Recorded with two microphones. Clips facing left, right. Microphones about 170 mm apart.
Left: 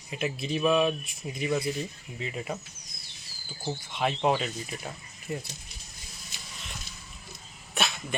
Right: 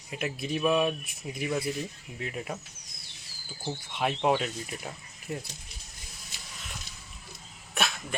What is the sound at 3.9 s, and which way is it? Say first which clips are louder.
Speech: even; 5° right (ahead or behind).